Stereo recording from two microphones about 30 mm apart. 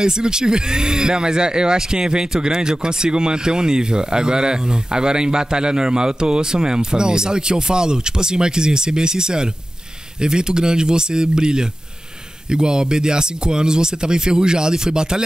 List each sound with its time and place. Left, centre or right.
0.0 s speech: right